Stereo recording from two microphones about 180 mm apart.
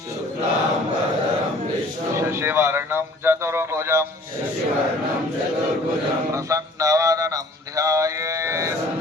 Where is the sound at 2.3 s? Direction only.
15° right (ahead or behind).